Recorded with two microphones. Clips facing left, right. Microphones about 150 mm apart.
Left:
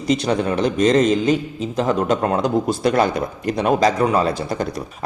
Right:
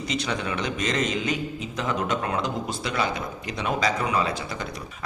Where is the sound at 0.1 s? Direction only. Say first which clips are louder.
Left 11 dB; 40° left (ahead or behind).